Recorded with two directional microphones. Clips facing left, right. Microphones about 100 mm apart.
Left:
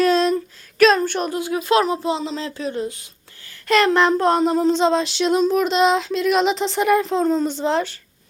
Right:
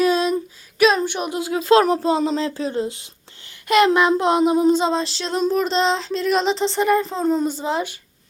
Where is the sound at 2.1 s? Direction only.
40° right (ahead or behind); by 4.1 s 10° right (ahead or behind).